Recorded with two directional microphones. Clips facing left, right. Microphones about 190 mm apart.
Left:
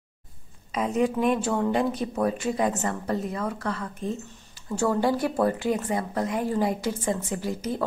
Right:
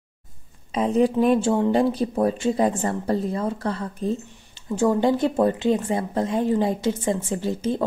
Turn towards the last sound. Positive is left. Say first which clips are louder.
# right 4 dB
turn(degrees=-25)  # may be behind; listen again after turning